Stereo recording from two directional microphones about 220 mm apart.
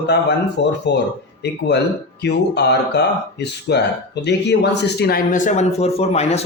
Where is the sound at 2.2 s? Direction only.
50° left (ahead or behind).